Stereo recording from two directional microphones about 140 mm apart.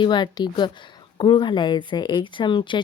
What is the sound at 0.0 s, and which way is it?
A woman's voice, 30° left (ahead or behind).